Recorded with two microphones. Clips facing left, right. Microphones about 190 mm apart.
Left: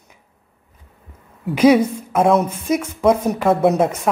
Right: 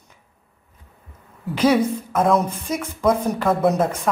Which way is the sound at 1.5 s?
10° left (ahead or behind).